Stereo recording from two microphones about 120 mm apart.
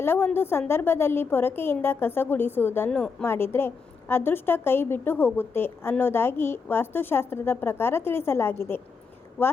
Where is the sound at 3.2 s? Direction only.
20° left (ahead or behind).